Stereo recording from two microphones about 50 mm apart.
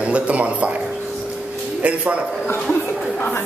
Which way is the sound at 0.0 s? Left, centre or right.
Right.